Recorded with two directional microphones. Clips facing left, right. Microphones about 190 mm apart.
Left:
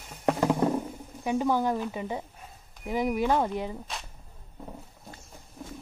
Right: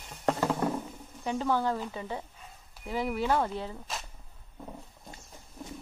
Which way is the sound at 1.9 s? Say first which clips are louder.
Left 4 dB; 15° left (ahead or behind).